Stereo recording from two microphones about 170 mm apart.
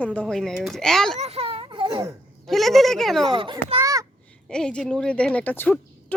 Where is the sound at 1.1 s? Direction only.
35° right (ahead or behind).